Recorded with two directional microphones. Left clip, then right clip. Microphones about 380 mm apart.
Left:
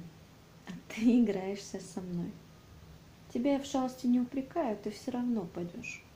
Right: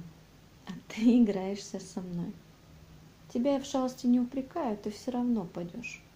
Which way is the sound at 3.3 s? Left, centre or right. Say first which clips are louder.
Right 2 dB; centre.